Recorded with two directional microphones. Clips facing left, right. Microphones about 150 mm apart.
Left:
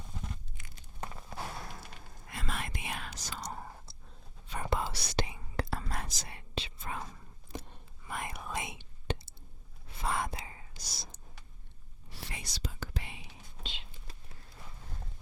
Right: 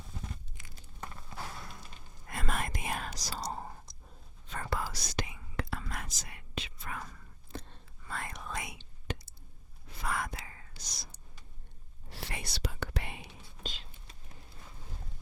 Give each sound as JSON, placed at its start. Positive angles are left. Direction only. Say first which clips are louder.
{"t": 2.3, "sound": "whispering", "louder": "right 3 dB", "side_deg": -50}
{"t": 3.9, "sound": "a sound", "louder": "left 1 dB", "side_deg": -15}
{"t": 4.4, "sound": "whispering", "louder": "left 2 dB", "side_deg": 15}
{"t": 9.1, "sound": "a sound", "louder": "left 3 dB", "side_deg": 30}
{"t": 9.9, "sound": "whispering", "louder": "left 2 dB", "side_deg": 25}
{"t": 12.0, "sound": "whispering", "louder": "right 4 dB", "side_deg": -65}